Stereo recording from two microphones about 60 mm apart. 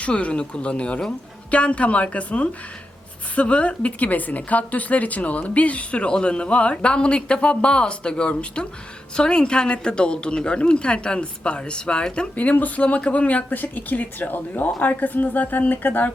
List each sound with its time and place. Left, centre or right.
0.0 s a woman's voice: left